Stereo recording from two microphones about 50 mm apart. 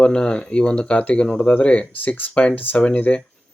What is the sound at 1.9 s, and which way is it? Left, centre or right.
Speech, left.